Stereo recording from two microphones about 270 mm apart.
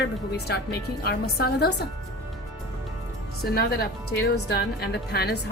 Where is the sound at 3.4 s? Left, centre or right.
Left.